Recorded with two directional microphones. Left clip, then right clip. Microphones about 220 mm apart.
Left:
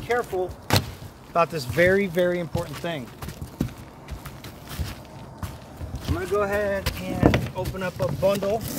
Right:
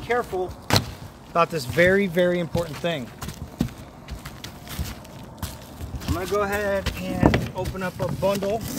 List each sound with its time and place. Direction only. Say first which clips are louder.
0.0 s vehicle: even; 15° right (ahead or behind)
1.3 s speech: right 1 dB; 20° right (ahead or behind)
2.6 s rowboat: right 4 dB; 35° right (ahead or behind)
6.0 s speech: even; 45° right (ahead or behind)
7.2 s speech: even; 5° right (ahead or behind)